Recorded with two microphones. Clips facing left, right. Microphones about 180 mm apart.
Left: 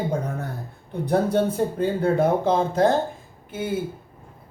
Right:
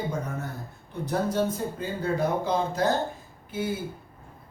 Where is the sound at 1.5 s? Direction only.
60° left (ahead or behind).